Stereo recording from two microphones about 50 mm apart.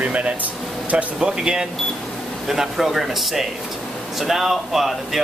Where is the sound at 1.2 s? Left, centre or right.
Centre.